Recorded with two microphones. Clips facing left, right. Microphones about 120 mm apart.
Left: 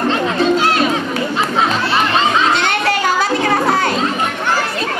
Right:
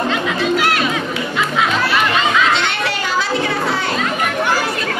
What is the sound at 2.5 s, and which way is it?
Children playing, 45° left (ahead or behind).